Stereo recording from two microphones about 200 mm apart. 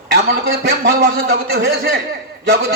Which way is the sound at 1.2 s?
50° right (ahead or behind).